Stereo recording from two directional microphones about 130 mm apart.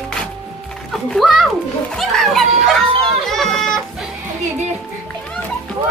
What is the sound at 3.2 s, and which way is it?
Music, centre (ahead or behind).